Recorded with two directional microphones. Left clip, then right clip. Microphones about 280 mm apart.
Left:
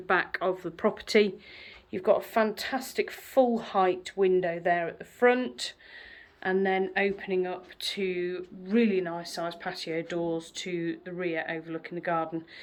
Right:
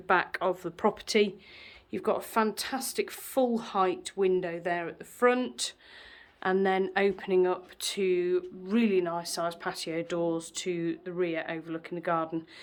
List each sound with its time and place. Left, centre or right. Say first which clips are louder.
0.1 s speech: even; centre